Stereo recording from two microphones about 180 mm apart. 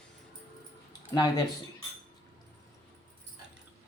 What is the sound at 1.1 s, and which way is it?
Speech, 25° left (ahead or behind).